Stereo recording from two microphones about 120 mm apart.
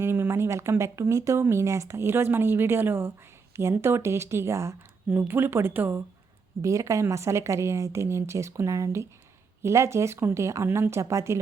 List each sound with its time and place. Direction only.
0.0 s speech: 20° right (ahead or behind)